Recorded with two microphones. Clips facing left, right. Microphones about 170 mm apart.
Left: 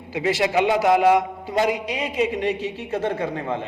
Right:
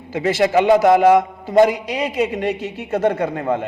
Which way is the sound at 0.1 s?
45° right (ahead or behind).